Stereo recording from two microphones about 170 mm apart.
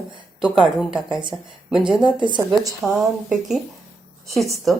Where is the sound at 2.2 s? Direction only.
25° right (ahead or behind).